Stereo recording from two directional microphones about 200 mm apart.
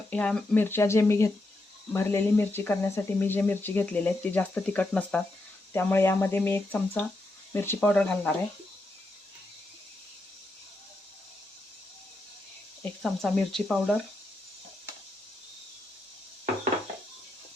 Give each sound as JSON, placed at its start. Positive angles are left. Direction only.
{"t": 0.1, "sound": "speech", "side_deg": 5}
{"t": 12.8, "sound": "speech", "side_deg": 5}